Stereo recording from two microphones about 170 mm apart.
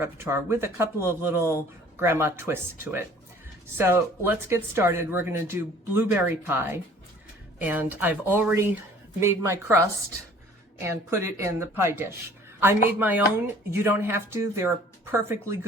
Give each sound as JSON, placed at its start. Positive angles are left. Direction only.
{"t": 0.0, "sound": "speech", "side_deg": -15}
{"t": 10.8, "sound": "speech", "side_deg": -15}